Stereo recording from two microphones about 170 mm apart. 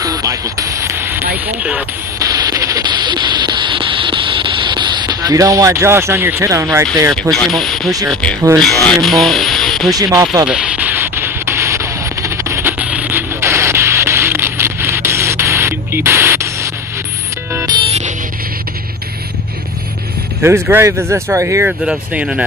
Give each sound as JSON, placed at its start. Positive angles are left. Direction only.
{"t": 0.0, "sound": "speech", "side_deg": -20}
{"t": 2.1, "sound": "a sound", "side_deg": -20}
{"t": 7.2, "sound": "speech", "side_deg": 0}
{"t": 9.9, "sound": "speech", "side_deg": -20}
{"t": 10.4, "sound": "a sound", "side_deg": -5}
{"t": 17.5, "sound": "music", "side_deg": -15}
{"t": 17.7, "sound": "music", "side_deg": -40}
{"t": 20.4, "sound": "speech", "side_deg": -15}